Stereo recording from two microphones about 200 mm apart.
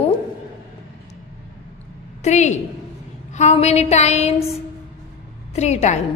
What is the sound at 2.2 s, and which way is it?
A woman's voice, 35° left (ahead or behind).